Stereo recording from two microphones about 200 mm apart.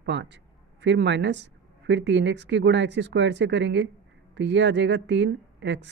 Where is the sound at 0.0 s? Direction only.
60° right (ahead or behind).